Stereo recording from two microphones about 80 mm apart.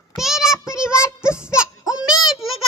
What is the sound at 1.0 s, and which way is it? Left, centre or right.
Child singing, left.